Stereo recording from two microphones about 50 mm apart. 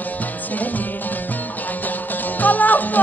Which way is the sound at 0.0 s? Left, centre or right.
Left.